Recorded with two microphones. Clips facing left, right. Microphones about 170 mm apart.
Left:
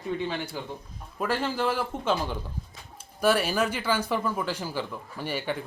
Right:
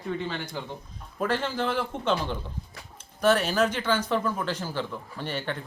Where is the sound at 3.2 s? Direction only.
10° left (ahead or behind).